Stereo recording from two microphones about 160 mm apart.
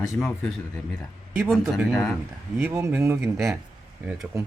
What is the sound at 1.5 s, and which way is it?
Speech, 5° left (ahead or behind).